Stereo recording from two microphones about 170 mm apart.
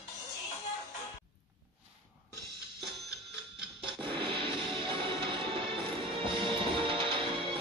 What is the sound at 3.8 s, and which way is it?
Music, 30° right (ahead or behind).